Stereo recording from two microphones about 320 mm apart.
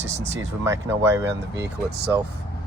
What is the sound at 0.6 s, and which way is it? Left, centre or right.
Speech, centre.